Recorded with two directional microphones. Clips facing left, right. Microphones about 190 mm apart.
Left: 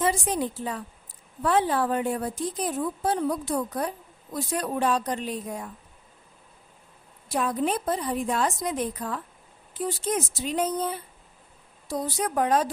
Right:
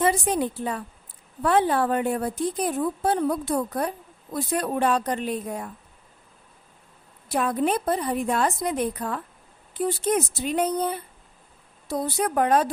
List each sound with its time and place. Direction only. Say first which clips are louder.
0.0 s a woman's voice: right 3 dB; 60° right (ahead or behind)
7.3 s a woman's voice: right 2 dB; 60° right (ahead or behind)